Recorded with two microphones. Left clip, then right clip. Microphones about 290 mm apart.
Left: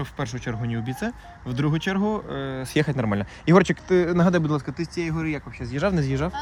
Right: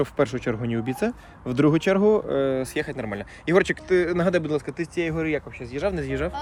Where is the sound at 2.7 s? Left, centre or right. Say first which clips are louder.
Left 4 dB; left; by 5.4 s centre.